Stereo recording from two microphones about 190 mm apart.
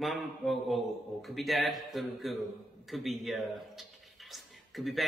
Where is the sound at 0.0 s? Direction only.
Centre (ahead or behind).